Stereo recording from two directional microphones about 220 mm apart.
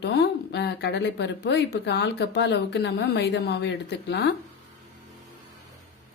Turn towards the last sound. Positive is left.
turn(degrees=50)  # may be behind; listen again after turning